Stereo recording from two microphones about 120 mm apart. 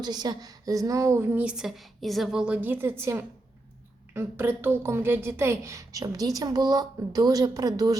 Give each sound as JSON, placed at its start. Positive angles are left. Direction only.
{"t": 0.0, "sound": "a woman's voice", "side_deg": -35}